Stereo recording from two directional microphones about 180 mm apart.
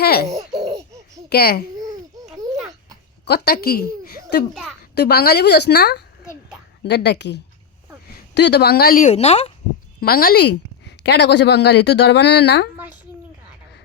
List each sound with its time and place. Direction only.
0.0 s laughter: 60° left (ahead or behind)
0.3 s laughter: 20° right (ahead or behind)
1.3 s a woman's voice: 60° left (ahead or behind)
1.8 s babbling: 20° right (ahead or behind)
3.2 s a woman's voice: 60° left (ahead or behind)
9.1 s speech: 35° left (ahead or behind)
10.0 s speech: 55° left (ahead or behind); by 12.6 s 75° left (ahead or behind)